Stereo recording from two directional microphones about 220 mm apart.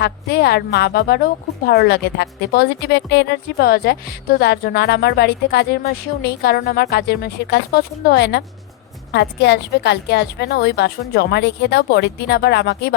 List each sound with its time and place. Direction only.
0.0 s a woman's voice: 45° left (ahead or behind)